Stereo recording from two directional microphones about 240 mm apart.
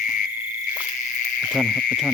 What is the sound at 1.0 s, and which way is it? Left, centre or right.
Frog, left.